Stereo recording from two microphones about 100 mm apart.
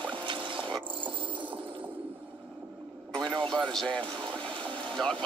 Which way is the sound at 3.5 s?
5° left (ahead or behind).